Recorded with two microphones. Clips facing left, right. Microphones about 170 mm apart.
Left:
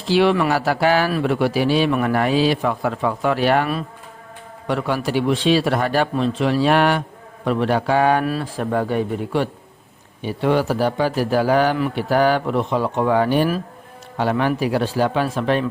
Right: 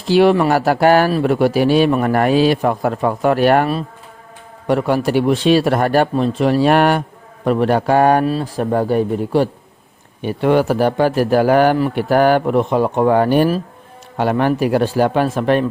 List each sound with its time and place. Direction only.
0.1 s a man's voice: 45° right (ahead or behind)
8.2 s speech: 25° right (ahead or behind)
8.5 s speech: 40° right (ahead or behind)
10.2 s a man's voice: 55° right (ahead or behind)